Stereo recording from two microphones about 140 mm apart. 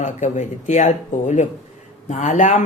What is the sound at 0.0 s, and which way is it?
Speech, 55° left (ahead or behind).